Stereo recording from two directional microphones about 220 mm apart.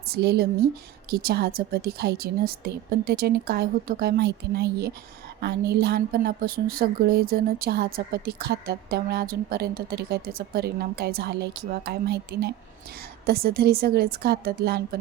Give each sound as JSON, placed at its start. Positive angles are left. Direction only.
{"t": 0.1, "sound": "a woman's voice", "side_deg": -45}